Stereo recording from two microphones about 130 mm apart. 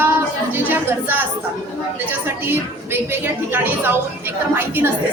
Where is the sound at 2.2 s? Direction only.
15° right (ahead or behind).